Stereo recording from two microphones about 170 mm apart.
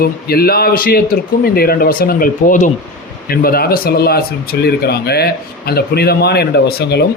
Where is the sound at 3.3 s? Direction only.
60° left (ahead or behind).